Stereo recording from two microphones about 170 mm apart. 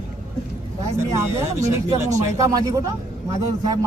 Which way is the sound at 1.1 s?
15° right (ahead or behind).